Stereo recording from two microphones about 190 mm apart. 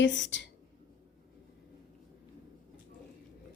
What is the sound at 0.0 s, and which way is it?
Speech, 75° left (ahead or behind).